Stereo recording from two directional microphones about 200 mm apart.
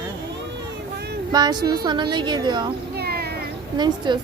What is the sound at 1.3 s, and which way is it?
A woman's voice, 20° right (ahead or behind).